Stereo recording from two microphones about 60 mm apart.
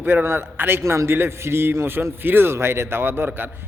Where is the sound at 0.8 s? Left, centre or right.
Right.